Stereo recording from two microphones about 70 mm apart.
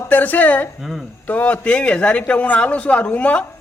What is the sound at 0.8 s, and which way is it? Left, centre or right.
Speech, centre.